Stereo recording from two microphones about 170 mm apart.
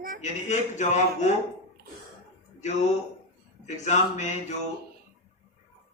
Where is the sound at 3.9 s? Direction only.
45° left (ahead or behind).